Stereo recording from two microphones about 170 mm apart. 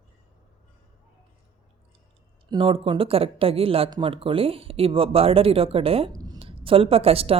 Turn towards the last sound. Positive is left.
turn(degrees=-35)  # may be behind; listen again after turning